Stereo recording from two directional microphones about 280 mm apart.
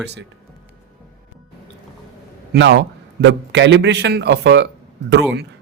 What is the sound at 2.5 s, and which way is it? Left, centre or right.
A man's voice, right.